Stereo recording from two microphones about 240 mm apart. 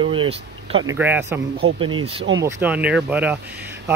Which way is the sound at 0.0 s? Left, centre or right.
Right.